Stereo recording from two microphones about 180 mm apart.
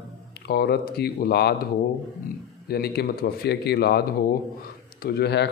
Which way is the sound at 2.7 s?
60° left (ahead or behind).